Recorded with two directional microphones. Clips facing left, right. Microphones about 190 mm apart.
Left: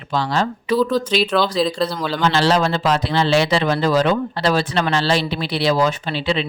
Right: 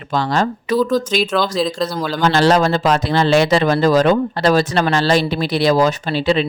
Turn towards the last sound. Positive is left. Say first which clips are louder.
# right 5 dB
turn(degrees=-40)  # may be behind; listen again after turning